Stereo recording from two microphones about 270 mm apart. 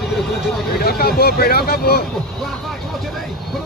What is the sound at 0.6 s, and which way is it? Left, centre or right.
Speech, left.